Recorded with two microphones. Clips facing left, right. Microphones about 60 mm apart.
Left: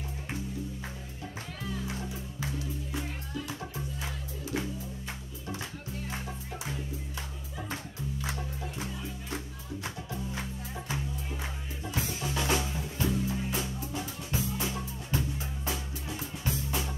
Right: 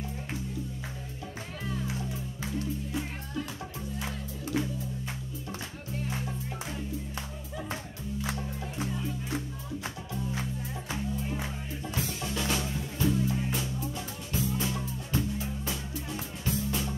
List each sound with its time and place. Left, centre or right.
12.0 s drum kit: centre
15.1 s music: centre
16.4 s music: centre